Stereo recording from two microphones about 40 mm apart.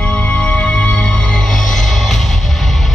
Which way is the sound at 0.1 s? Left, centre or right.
Left.